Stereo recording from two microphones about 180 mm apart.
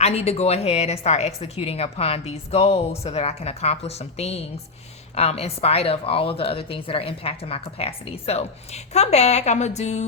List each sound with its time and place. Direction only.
0.0 s speech: 35° left (ahead or behind)